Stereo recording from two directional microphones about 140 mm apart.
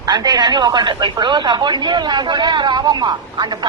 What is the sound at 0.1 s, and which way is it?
A man's voice, 30° right (ahead or behind).